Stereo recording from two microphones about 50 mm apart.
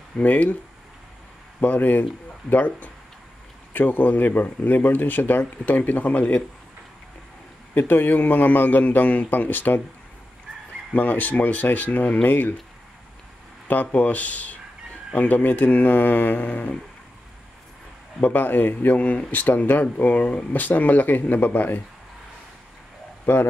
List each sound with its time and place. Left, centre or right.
0.2 s speech: left
1.6 s speech: left
7.7 s speech: left
10.9 s speech: left
13.7 s speech: left
18.2 s speech: left
18.9 s speech: left
19.4 s speech: left